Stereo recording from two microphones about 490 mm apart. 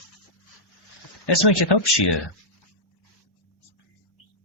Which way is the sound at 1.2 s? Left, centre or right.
Left.